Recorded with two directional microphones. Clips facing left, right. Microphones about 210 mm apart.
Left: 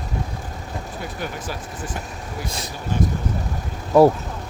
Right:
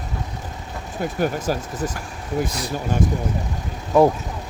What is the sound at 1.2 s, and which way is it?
Speech, 45° right (ahead or behind).